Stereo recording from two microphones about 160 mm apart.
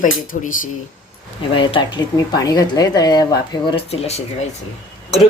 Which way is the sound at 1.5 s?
30° left (ahead or behind).